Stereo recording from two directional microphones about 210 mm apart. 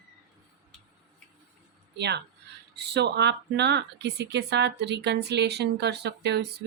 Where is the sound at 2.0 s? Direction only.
50° right (ahead or behind).